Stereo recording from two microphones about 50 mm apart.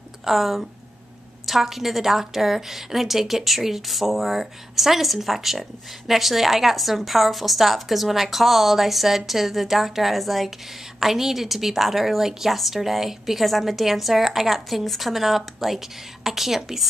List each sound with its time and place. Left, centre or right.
0.2 s a woman's voice: centre